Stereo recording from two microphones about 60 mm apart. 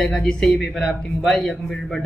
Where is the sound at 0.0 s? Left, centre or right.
Centre.